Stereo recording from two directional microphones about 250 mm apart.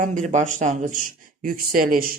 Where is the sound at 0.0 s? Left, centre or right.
Right.